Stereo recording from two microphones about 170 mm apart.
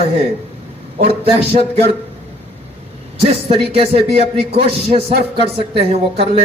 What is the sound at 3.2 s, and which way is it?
Speech, 35° right (ahead or behind).